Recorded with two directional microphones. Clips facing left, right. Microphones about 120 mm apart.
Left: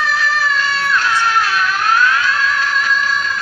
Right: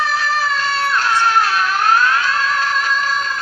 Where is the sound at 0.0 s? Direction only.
40° right (ahead or behind).